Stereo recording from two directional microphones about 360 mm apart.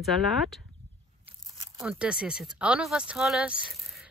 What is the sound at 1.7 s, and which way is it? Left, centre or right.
Speech, centre.